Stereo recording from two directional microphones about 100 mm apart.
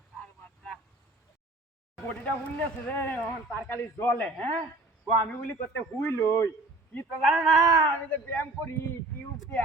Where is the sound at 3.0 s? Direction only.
25° left (ahead or behind).